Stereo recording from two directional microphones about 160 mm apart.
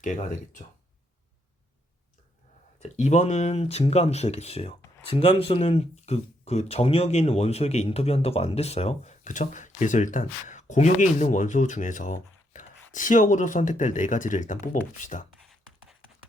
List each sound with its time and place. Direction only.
2.8 s speech: 45° left (ahead or behind)